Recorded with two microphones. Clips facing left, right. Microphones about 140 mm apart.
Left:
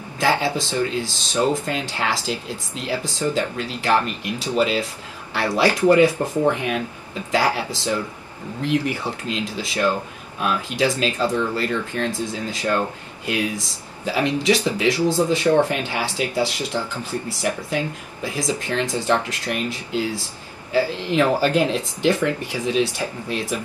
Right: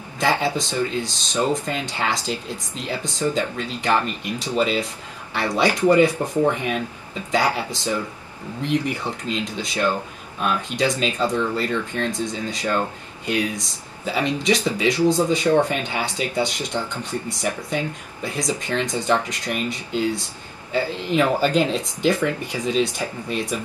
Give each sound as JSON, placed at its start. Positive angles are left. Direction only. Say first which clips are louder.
{"t": 0.2, "sound": "speech", "louder": "left 1 dB", "side_deg": 0}